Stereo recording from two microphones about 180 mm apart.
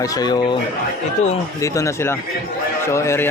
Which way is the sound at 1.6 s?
15° left (ahead or behind).